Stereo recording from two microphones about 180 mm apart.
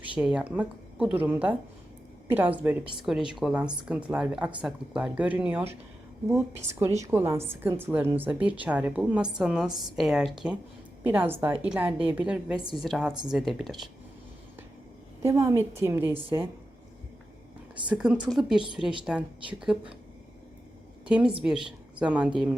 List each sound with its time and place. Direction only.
0.2 s a woman's voice: 5° right (ahead or behind)
7.0 s a woman's voice: 15° right (ahead or behind)
15.2 s a woman's voice: 15° right (ahead or behind)
17.8 s a woman's voice: 5° right (ahead or behind)
21.1 s a woman's voice: 5° right (ahead or behind)